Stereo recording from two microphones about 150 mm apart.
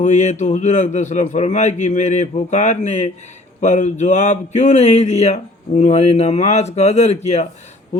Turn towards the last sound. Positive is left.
turn(degrees=45)  # may be behind; listen again after turning